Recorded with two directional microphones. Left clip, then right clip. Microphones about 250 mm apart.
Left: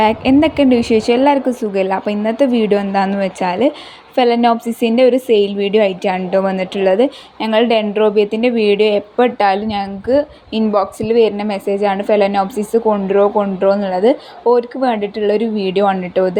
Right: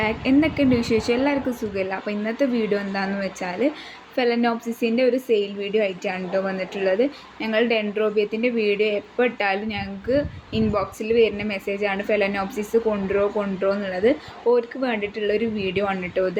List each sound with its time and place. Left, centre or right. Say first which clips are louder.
0.0 s a woman's voice: left 8 dB; left